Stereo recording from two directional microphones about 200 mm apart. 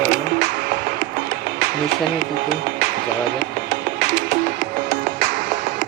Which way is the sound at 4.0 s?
45° right (ahead or behind).